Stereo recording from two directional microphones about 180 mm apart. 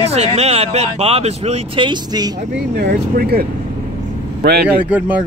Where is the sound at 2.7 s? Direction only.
65° right (ahead or behind).